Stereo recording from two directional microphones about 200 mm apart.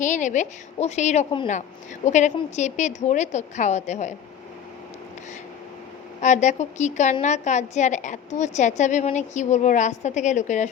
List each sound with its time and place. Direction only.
0.0 s a woman's voice: 40° left (ahead or behind)
6.2 s a woman's voice: 35° left (ahead or behind)